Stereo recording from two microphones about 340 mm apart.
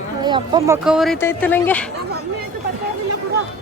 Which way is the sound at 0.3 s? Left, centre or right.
Centre.